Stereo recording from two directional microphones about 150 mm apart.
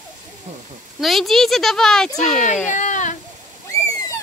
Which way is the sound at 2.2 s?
55° left (ahead or behind).